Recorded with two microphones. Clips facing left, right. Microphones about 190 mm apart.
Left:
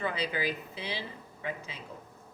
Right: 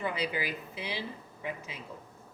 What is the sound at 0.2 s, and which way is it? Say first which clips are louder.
Speech: left 1 dB; 10° right (ahead or behind).